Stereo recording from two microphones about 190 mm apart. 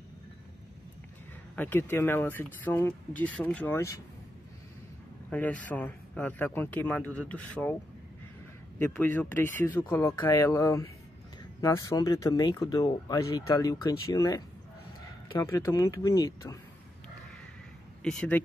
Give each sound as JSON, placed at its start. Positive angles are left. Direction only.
{"t": 1.5, "sound": "speech", "side_deg": 10}
{"t": 5.3, "sound": "speech", "side_deg": 10}
{"t": 8.7, "sound": "speech", "side_deg": 10}
{"t": 18.0, "sound": "speech", "side_deg": 5}